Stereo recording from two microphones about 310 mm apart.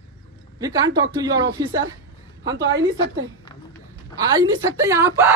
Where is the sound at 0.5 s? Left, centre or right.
Centre.